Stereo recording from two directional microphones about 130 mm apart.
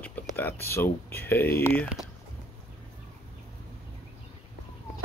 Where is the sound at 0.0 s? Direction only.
15° left (ahead or behind).